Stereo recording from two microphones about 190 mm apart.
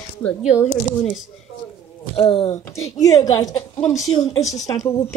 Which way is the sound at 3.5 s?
30° left (ahead or behind).